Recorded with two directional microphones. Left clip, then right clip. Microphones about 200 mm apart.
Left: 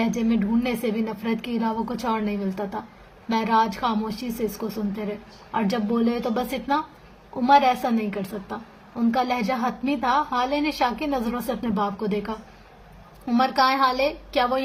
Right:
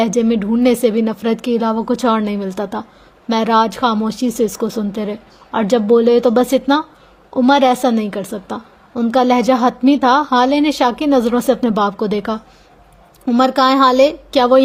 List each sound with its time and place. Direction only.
0.0 s a woman's voice: 50° right (ahead or behind)